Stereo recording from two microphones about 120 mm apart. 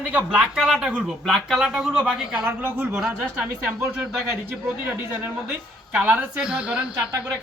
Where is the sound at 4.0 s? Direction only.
Centre (ahead or behind).